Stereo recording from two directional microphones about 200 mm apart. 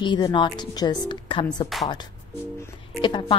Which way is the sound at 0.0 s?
25° left (ahead or behind).